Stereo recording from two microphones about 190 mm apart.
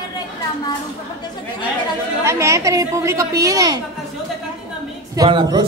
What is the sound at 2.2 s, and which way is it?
A woman's voice, 15° right (ahead or behind).